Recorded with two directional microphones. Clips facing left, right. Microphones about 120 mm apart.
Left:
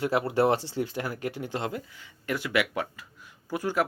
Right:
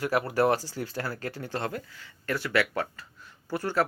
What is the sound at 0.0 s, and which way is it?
Speech, 25° left (ahead or behind).